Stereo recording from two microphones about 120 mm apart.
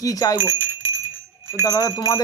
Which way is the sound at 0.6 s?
15° right (ahead or behind).